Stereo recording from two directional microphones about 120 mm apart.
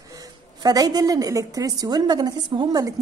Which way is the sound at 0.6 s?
35° right (ahead or behind).